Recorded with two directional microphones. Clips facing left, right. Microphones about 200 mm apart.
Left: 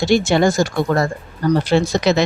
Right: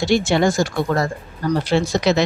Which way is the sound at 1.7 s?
55° left (ahead or behind).